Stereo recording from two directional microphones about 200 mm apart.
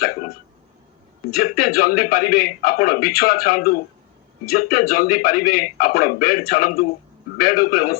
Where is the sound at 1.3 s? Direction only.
45° left (ahead or behind).